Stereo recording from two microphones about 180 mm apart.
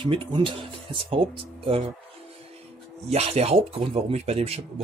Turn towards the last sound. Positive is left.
turn(degrees=-35)  # may be behind; listen again after turning